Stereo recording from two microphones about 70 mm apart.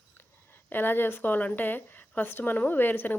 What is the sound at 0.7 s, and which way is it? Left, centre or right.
Speech, left.